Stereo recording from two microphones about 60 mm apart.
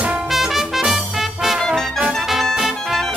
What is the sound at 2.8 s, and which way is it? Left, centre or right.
Music, centre.